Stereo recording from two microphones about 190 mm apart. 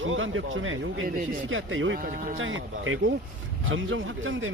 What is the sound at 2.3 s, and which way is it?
Speech, 90° right.